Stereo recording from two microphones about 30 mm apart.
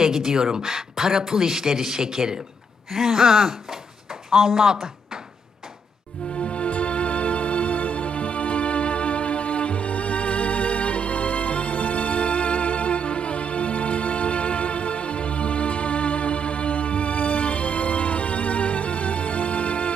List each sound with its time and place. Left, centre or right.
0.0 s a man's voice: centre
4.3 s speech: centre
6.3 s music: left